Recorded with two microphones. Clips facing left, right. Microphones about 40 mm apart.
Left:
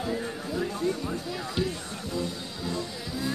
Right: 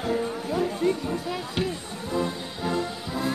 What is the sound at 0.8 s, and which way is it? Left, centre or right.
Speech, right.